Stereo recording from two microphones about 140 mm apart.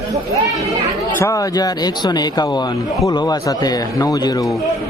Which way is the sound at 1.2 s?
25° left (ahead or behind).